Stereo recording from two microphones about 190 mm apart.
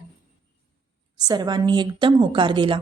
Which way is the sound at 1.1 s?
20° right (ahead or behind).